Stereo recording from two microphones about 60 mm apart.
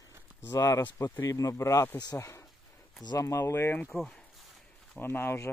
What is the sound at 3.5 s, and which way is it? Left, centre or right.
Speech, left.